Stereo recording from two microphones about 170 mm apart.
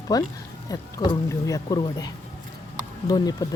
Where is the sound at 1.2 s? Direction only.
20° left (ahead or behind).